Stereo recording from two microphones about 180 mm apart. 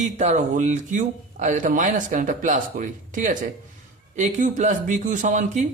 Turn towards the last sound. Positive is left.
turn(degrees=-45)  # may be behind; listen again after turning